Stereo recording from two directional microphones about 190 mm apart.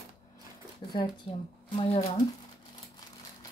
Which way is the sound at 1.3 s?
30° left (ahead or behind).